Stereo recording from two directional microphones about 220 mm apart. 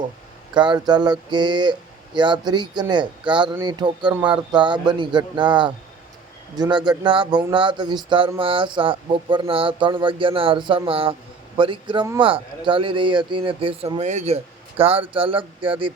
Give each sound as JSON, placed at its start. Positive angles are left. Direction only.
{"t": 0.5, "sound": "speech", "side_deg": -20}